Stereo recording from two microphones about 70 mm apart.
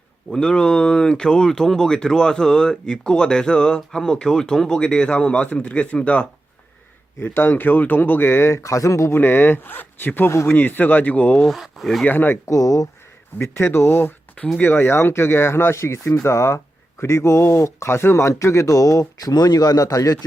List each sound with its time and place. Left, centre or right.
0.3 s speech: centre
7.2 s speech: left
9.1 s speech: left
11.4 s speech: centre
12.0 s speech: left
12.5 s speech: left
13.4 s speech: left